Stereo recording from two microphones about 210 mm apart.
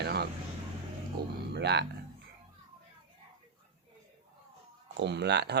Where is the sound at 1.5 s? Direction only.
55° right (ahead or behind).